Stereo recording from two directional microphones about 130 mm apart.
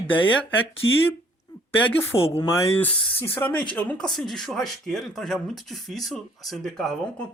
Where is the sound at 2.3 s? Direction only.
20° left (ahead or behind).